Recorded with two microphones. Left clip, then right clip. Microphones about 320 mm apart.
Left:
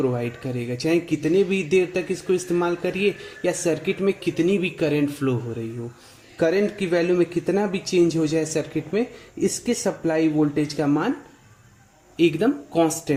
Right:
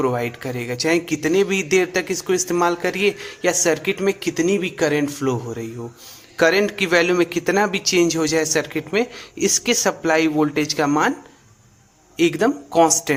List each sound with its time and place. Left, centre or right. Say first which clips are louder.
0.1 s a man's voice: right 4 dB; right
6.3 s a man's voice: right 4 dB; right
9.8 s speech: right 1 dB; right
10.5 s a man's voice: right 4 dB; right
12.1 s a man's voice: right 2 dB; right